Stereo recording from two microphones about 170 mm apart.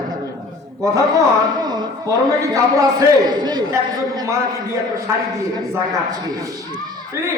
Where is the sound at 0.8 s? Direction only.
20° right (ahead or behind).